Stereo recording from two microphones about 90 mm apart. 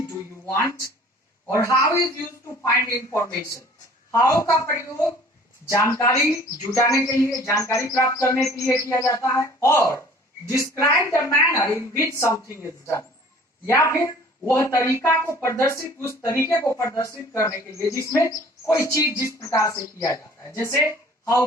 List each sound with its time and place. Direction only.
1.5 s speech: 35° left (ahead or behind)